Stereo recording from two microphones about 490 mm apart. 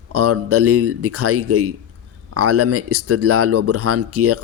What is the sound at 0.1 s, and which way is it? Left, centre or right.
Speech, right.